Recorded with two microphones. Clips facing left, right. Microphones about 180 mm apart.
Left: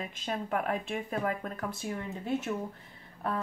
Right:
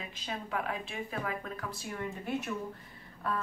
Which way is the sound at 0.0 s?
45° left (ahead or behind).